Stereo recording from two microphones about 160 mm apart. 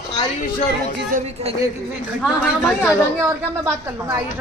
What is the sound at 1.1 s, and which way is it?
Speech, 60° right (ahead or behind).